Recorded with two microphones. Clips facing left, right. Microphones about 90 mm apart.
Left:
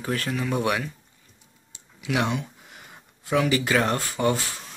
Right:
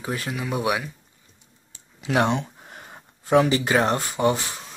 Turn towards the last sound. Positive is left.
turn(degrees=-20)  # may be behind; listen again after turning